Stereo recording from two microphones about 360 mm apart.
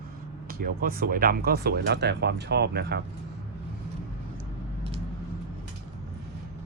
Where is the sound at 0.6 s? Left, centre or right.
Right.